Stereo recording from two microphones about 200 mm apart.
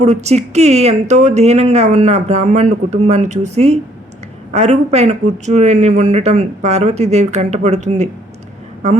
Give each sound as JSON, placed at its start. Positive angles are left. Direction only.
{"t": 0.0, "sound": "speech", "side_deg": -35}